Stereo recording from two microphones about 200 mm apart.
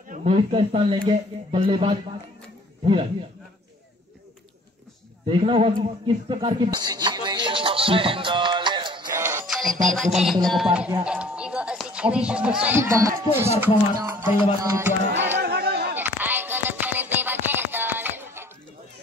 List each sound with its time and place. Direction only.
0.1 s a man's voice: 30° right (ahead or behind)
5.3 s speech: 25° right (ahead or behind)
6.2 s music: 25° right (ahead or behind)
9.5 s music: centre (ahead or behind)
10.4 s speech: centre (ahead or behind)
15.3 s a sound: 50° right (ahead or behind)
16.0 s music: 10° right (ahead or behind)